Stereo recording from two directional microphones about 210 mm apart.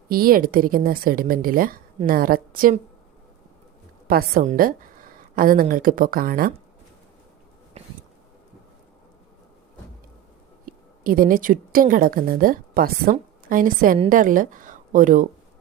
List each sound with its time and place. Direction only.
0.1 s speech: 45° right (ahead or behind)
4.1 s speech: 45° right (ahead or behind)
10.7 s a woman's voice: 40° right (ahead or behind)